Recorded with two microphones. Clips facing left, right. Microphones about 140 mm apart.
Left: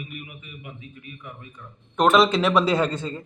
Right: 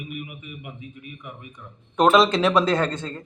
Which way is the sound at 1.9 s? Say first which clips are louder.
Right 1 dB; centre (ahead or behind).